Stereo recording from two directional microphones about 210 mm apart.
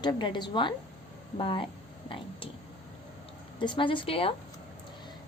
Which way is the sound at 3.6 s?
25° left (ahead or behind).